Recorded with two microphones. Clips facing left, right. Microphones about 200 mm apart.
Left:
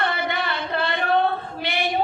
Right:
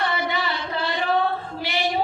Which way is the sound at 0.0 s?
55° left (ahead or behind).